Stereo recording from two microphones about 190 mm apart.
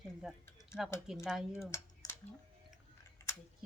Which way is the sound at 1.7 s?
15° left (ahead or behind).